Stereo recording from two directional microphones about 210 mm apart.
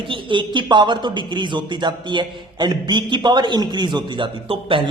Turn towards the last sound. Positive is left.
turn(degrees=-25)  # may be behind; listen again after turning